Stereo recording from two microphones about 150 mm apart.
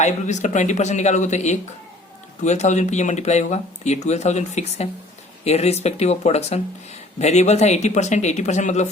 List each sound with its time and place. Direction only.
0.0 s speech: 50° left (ahead or behind)